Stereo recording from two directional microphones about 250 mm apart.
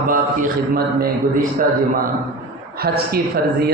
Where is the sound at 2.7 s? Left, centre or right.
Right.